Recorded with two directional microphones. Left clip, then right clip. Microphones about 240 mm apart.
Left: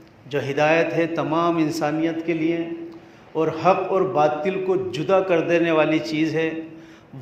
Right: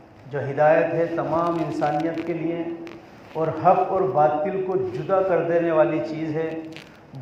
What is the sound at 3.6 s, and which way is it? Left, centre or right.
Speech, left.